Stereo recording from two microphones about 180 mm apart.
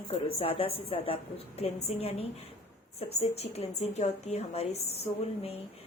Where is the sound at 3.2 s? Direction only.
35° left (ahead or behind).